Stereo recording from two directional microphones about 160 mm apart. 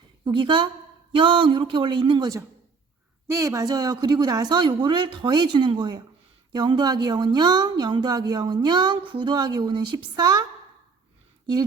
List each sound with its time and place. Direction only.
0.3 s a woman's voice: 30° right (ahead or behind)